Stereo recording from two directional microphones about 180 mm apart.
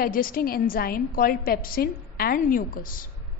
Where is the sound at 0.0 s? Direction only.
50° left (ahead or behind).